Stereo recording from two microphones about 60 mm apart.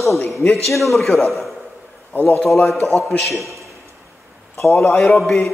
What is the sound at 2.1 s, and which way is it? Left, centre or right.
Speech, left.